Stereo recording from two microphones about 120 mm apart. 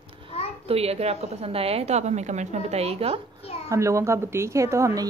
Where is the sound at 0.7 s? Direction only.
60° right (ahead or behind).